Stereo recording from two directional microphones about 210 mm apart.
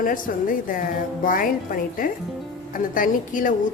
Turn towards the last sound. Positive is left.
turn(degrees=40)  # may be behind; listen again after turning